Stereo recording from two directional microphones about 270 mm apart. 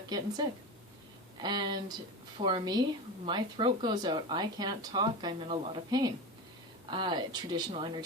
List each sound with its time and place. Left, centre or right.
0.1 s speech: centre
1.4 s speech: centre